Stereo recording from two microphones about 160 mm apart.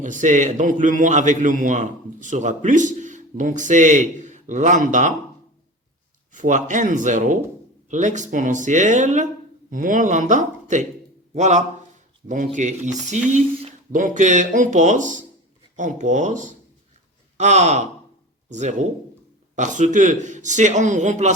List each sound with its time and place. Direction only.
0.0 s a man's voice: 50° right (ahead or behind)
6.3 s a man's voice: 50° right (ahead or behind)